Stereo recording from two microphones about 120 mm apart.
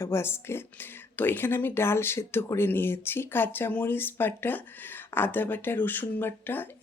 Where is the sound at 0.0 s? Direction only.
20° left (ahead or behind).